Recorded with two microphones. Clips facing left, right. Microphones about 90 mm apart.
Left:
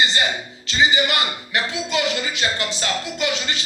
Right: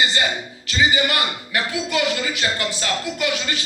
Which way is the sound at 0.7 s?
25° left (ahead or behind).